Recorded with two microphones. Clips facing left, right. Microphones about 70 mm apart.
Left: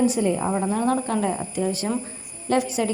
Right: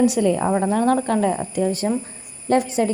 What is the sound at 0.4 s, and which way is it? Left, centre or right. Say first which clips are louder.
Speech: right 4 dB; right.